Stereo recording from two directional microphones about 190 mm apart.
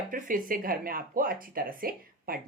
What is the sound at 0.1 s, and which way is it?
Speech, 45° right (ahead or behind).